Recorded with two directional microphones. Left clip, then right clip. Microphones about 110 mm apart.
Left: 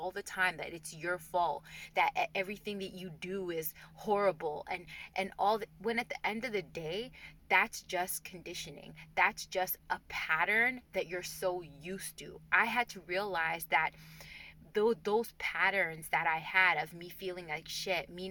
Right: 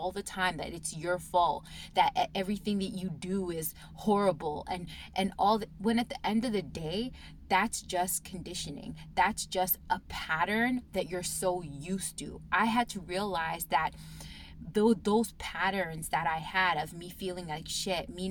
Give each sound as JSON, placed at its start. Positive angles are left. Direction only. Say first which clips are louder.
{"t": 0.1, "sound": "speech", "louder": "right 1 dB", "side_deg": -25}